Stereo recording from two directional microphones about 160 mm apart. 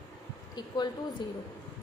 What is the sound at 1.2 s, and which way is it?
Speech, 30° left (ahead or behind).